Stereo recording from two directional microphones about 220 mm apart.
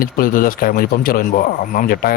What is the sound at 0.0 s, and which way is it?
Speech, 40° left (ahead or behind).